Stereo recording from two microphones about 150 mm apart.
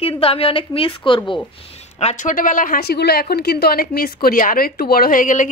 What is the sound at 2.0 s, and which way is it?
A woman's voice, 50° left (ahead or behind).